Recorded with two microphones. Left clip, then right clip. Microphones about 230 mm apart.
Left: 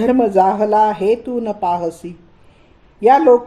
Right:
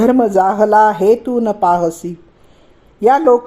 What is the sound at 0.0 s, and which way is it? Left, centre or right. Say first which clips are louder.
Speech: right 1 dB; right.